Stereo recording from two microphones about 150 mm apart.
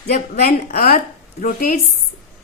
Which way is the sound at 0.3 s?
85° left.